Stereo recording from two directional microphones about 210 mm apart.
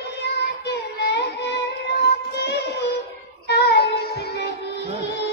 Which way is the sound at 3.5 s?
50° left (ahead or behind).